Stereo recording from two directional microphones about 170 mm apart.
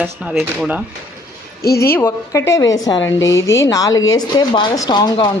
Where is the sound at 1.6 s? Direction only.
65° left (ahead or behind).